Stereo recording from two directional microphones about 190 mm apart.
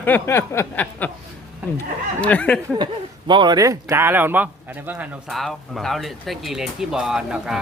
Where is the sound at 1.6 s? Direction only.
10° right (ahead or behind).